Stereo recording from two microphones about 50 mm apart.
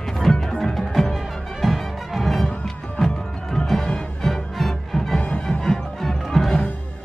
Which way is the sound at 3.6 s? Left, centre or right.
Centre.